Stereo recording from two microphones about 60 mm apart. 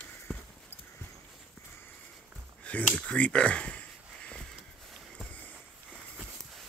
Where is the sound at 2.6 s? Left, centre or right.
Left.